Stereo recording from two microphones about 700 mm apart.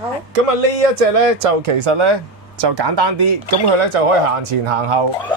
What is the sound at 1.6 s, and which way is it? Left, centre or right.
Speech, right.